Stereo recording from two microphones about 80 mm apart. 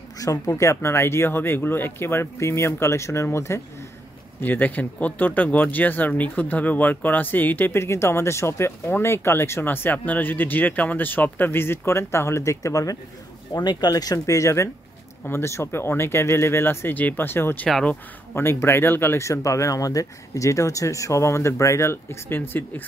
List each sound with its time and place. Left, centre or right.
0.2 s speech: left
4.4 s speech: left
13.5 s speech: left